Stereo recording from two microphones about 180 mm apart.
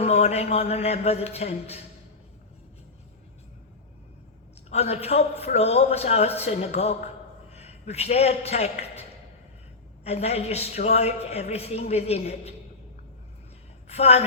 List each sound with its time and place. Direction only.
0.0 s a man's voice: 35° left (ahead or behind)
4.7 s a man's voice: 35° left (ahead or behind)
13.8 s a woman's voice: 35° left (ahead or behind)